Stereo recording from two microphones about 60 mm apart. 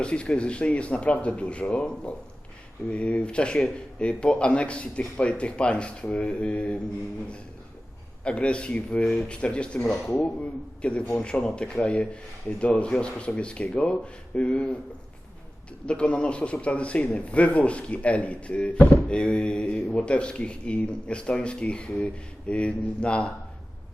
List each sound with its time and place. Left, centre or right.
0.0 s a man's voice: centre
8.2 s a man's voice: centre
15.9 s a man's voice: left